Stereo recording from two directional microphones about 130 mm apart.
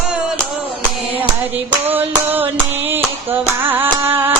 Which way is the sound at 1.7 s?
15° right (ahead or behind).